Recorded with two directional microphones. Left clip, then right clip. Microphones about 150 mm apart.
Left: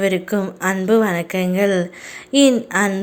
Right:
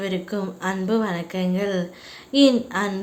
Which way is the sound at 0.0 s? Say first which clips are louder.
Left 8 dB; 30° left (ahead or behind).